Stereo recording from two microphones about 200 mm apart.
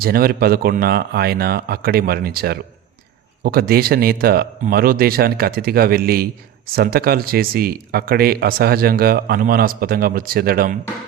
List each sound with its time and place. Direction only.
0.0 s speech: 50° right (ahead or behind)